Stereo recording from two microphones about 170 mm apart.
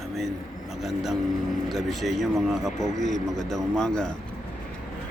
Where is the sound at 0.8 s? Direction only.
Centre (ahead or behind).